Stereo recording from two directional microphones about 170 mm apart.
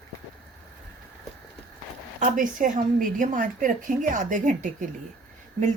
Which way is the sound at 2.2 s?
50° right (ahead or behind).